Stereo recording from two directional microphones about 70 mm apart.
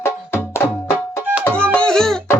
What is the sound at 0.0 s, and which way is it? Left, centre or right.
Music, left.